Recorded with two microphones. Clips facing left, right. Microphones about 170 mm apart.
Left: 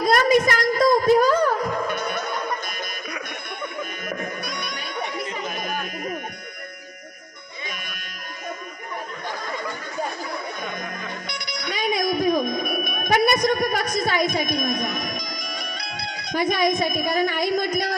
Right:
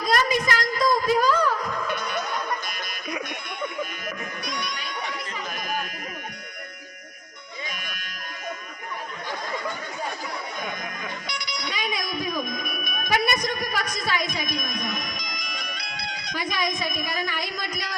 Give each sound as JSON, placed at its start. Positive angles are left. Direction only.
{"t": 0.0, "sound": "a sound", "side_deg": 55}
{"t": 4.1, "sound": "music", "side_deg": 50}
{"t": 11.3, "sound": "music", "side_deg": 50}